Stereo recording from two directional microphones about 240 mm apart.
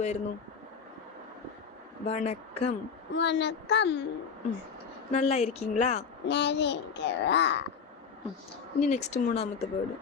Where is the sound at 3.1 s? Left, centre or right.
Left.